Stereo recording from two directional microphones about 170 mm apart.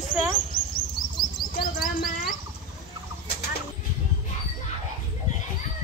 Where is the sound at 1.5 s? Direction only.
60° left (ahead or behind).